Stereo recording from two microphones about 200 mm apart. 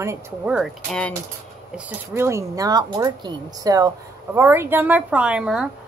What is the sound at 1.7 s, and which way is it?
A woman's voice, 10° right (ahead or behind).